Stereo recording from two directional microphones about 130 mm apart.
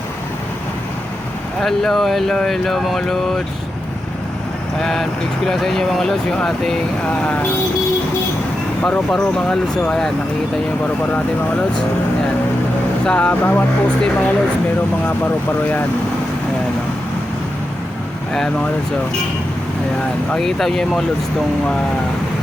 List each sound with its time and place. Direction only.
1.6 s speech: 5° left (ahead or behind)
4.8 s speech: 5° left (ahead or behind)
8.8 s speech: 5° left (ahead or behind)
13.1 s speech: 10° left (ahead or behind)
18.3 s speech: 5° left (ahead or behind)
20.3 s speech: 5° left (ahead or behind)